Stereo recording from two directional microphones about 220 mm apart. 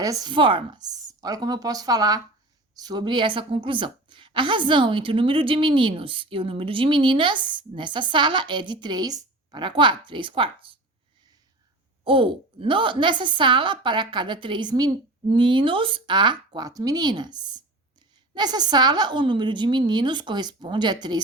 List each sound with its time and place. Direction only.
0.0 s a woman's voice: 15° right (ahead or behind)
12.0 s a woman's voice: 25° right (ahead or behind)